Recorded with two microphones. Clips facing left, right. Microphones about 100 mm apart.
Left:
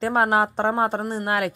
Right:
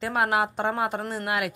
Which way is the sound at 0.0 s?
35° left (ahead or behind).